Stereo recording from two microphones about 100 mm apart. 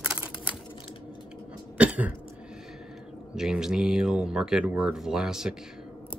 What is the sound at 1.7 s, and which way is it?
Cough, 15° right (ahead or behind).